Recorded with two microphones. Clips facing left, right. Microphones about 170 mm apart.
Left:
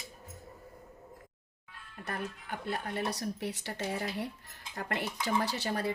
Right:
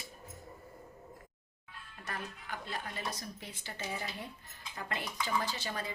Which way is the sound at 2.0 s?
55° left (ahead or behind).